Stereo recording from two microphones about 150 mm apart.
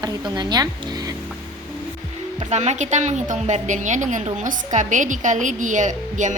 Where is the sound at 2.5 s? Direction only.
50° right (ahead or behind).